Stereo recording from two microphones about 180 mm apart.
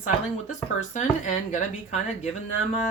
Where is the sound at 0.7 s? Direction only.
45° left (ahead or behind).